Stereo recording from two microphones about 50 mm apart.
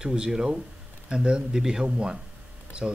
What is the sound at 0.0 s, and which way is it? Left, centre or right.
Speech, centre.